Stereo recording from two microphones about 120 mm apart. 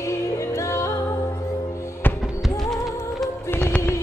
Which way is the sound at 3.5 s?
15° left (ahead or behind).